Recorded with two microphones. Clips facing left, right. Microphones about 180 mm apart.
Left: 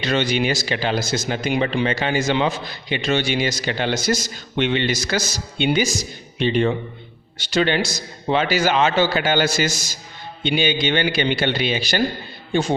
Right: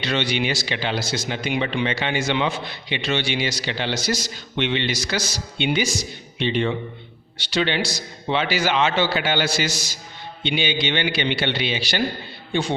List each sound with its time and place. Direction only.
0.0 s speech: 45° left (ahead or behind)